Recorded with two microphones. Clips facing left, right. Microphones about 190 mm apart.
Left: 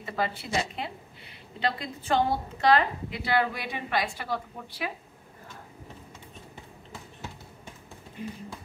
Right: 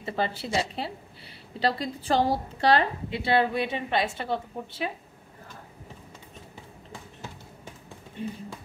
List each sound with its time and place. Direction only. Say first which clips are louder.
0.0 s a woman's voice: right 2 dB; 30° right (ahead or behind)